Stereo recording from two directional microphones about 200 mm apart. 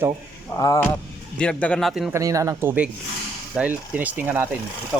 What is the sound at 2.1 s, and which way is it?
Speech, 15° right (ahead or behind).